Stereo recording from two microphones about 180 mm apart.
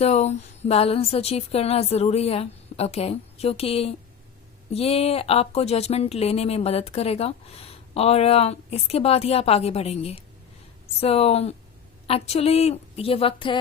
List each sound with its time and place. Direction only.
0.0 s speech: 40° left (ahead or behind)